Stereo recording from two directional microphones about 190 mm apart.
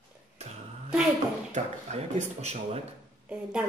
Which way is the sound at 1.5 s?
35° right (ahead or behind).